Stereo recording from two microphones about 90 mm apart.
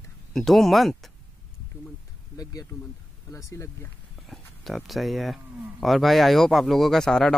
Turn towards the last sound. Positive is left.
turn(degrees=5)  # may be behind; listen again after turning